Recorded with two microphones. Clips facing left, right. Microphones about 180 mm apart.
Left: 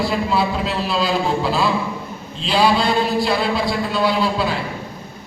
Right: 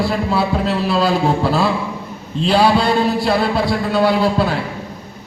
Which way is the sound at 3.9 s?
55° right (ahead or behind).